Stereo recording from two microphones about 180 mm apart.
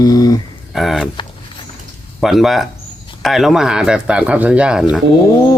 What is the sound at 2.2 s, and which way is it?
Speech, centre (ahead or behind).